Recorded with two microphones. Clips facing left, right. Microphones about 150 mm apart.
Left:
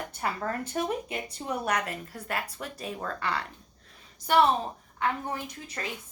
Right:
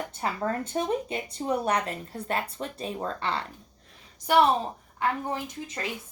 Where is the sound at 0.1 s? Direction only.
25° right (ahead or behind).